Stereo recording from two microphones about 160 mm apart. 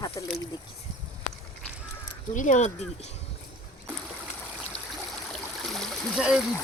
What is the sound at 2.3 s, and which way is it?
Speech, 50° left (ahead or behind).